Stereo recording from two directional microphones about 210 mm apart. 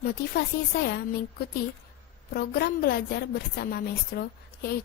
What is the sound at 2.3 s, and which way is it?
A woman's voice, 45° left (ahead or behind).